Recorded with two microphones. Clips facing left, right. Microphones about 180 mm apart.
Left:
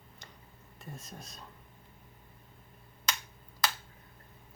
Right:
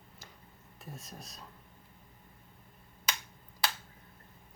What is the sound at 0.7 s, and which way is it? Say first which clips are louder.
Speech: left 1 dB; centre (ahead or behind).